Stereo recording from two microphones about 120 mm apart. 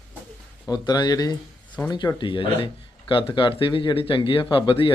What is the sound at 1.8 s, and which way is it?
Speech, 25° left (ahead or behind).